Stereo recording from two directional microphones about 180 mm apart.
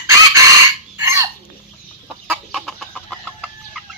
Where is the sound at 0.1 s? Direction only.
15° right (ahead or behind).